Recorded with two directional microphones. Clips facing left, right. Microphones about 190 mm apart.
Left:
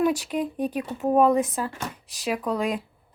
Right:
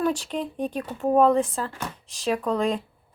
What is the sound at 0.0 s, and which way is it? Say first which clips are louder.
Speech: left 2 dB; 10° left (ahead or behind).